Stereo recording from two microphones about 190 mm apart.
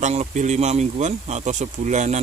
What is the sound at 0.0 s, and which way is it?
Speech, 40° right (ahead or behind).